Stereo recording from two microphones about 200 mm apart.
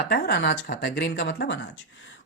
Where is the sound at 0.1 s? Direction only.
55° left (ahead or behind).